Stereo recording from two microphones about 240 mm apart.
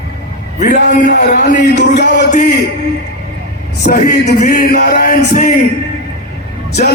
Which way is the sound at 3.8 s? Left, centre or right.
Left.